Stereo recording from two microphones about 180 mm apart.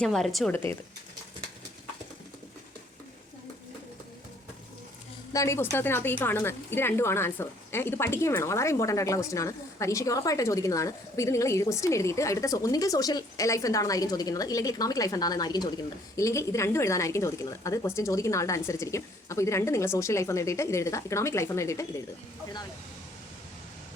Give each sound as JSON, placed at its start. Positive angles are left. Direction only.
{"t": 0.0, "sound": "speech", "side_deg": 0}
{"t": 0.5, "sound": "a woman's voice", "side_deg": 15}
{"t": 5.3, "sound": "a woman's voice", "side_deg": 15}